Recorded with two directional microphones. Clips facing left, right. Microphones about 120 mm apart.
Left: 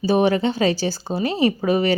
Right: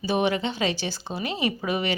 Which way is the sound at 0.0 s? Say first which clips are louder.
Left 6 dB; 40° left (ahead or behind).